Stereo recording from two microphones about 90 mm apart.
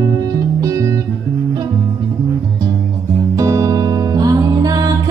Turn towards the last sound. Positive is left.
turn(degrees=-45)  # may be behind; listen again after turning